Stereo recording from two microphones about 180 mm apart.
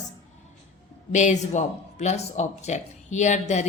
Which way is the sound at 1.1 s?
40° left (ahead or behind).